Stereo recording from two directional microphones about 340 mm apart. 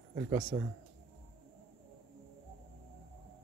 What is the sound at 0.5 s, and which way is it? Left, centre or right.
Speech, centre.